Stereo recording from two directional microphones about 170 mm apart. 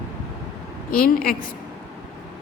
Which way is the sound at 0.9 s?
60° left (ahead or behind).